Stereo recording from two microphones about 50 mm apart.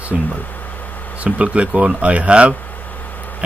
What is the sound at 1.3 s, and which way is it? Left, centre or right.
Speech, right.